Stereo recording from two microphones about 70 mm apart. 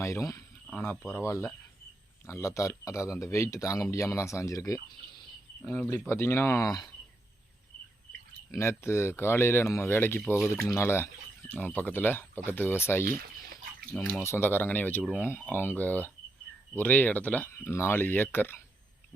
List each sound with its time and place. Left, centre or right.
0.0 s speech: left
1.0 s speech: left
5.6 s speech: left
6.1 s speech: left
8.5 s speech: left
11.6 s speech: left
13.9 s speech: centre
14.3 s speech: left
17.5 s speech: left